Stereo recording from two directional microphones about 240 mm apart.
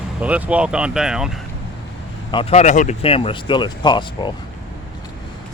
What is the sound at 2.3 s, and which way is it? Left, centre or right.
Speech, left.